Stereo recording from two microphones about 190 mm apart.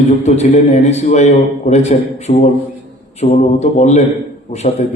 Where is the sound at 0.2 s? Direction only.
35° left (ahead or behind).